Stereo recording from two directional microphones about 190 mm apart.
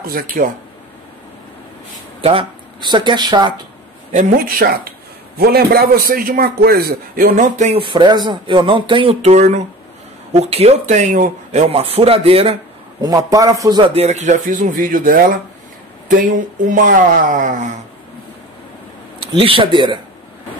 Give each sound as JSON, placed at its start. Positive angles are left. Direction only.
{"t": 0.0, "sound": "a man's voice", "side_deg": -50}
{"t": 2.2, "sound": "speech", "side_deg": -25}
{"t": 4.1, "sound": "a man's voice", "side_deg": -45}
{"t": 7.8, "sound": "speech", "side_deg": -25}
{"t": 13.0, "sound": "a man's voice", "side_deg": -20}
{"t": 19.3, "sound": "speech", "side_deg": -25}